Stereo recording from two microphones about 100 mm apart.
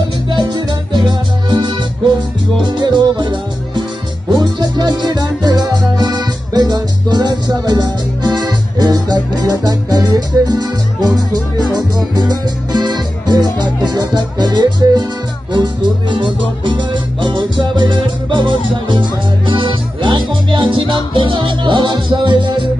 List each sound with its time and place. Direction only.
0.3 s music: 45° right (ahead or behind)